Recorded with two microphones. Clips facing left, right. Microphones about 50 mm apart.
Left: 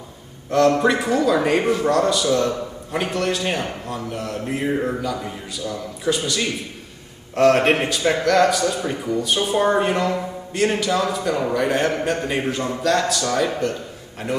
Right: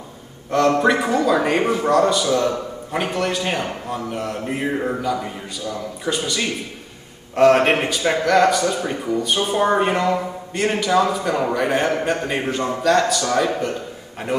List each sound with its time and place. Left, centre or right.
0.5 s a man's voice: centre